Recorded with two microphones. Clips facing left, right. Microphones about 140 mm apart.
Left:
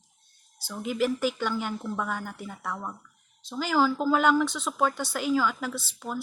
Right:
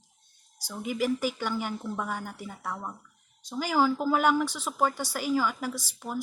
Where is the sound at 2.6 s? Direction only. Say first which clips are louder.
Left 1 dB; 30° right (ahead or behind).